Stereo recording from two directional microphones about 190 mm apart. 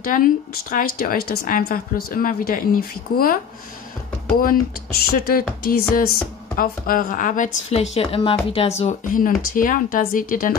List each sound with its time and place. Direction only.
0.0 s a woman's voice: 45° left (ahead or behind)
5.1 s a woman's voice: 50° left (ahead or behind)
7.7 s a woman's voice: 35° left (ahead or behind)